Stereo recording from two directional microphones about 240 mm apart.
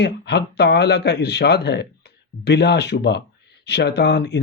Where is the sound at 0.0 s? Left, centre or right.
Left.